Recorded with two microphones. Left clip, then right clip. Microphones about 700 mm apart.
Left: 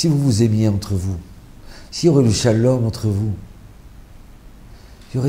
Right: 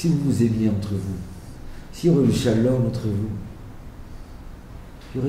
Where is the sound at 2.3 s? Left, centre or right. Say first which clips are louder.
Left 4 dB; left.